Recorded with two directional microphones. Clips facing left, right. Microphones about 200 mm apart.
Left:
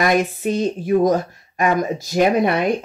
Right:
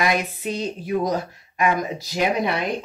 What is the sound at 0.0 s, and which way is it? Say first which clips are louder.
Speech: left 5 dB; 45° left (ahead or behind).